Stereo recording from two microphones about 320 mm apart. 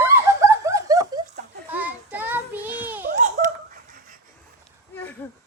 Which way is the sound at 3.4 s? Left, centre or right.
Right.